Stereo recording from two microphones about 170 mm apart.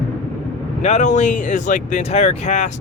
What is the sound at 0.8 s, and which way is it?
Speech, 45° left (ahead or behind).